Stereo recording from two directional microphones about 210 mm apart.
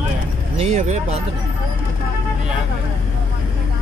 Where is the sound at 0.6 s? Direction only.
35° right (ahead or behind).